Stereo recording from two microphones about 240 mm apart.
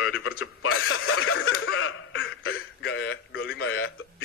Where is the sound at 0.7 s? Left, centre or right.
Left.